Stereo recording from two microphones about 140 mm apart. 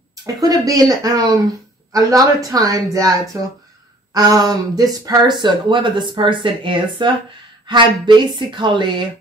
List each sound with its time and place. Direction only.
0.4 s a woman's voice: 25° right (ahead or behind)